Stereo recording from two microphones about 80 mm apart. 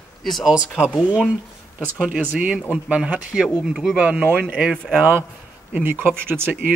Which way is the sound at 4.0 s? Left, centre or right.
Centre.